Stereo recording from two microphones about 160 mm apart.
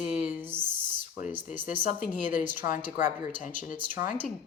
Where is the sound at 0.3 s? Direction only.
10° right (ahead or behind).